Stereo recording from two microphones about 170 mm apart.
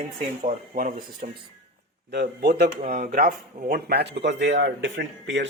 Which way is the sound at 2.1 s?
75° right (ahead or behind).